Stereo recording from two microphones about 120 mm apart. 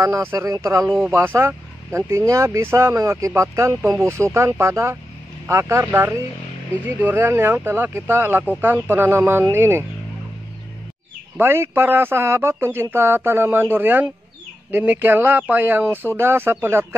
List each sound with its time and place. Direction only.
0.0 s speech: 25° right (ahead or behind)
11.3 s speech: 20° right (ahead or behind)